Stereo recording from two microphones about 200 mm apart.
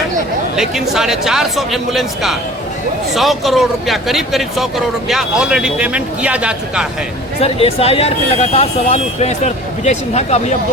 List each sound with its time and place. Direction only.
0.5 s speech: centre (ahead or behind)
7.4 s speech: 30° left (ahead or behind)